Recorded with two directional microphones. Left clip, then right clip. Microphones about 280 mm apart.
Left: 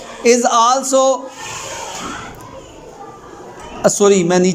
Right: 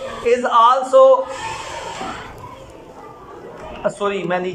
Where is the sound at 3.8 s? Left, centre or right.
Left.